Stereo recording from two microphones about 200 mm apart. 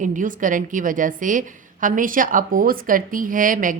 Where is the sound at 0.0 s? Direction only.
40° right (ahead or behind).